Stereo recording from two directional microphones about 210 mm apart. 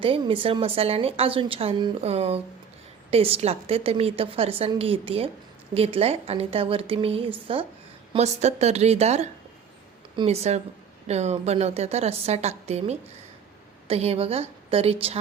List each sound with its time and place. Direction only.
0.0 s a woman's voice: 25° right (ahead or behind)